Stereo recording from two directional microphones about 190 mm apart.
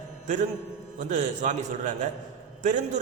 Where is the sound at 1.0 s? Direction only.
40° right (ahead or behind).